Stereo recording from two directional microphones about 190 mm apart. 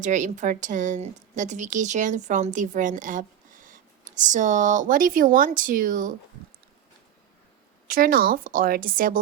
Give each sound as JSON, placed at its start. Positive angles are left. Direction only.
{"t": 0.0, "sound": "a woman's voice", "side_deg": -40}
{"t": 7.9, "sound": "a woman's voice", "side_deg": -45}